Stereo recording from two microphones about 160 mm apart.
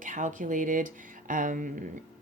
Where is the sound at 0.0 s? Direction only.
55° right (ahead or behind).